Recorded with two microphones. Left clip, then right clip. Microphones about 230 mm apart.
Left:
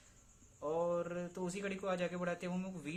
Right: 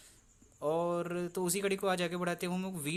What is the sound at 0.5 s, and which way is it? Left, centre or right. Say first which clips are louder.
Speech: right 4 dB; right.